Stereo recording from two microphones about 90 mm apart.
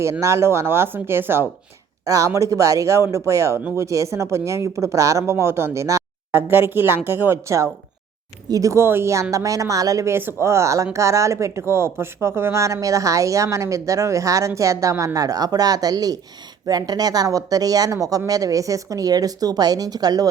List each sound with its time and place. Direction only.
0.0 s speech: 35° right (ahead or behind)
2.0 s speech: 40° right (ahead or behind)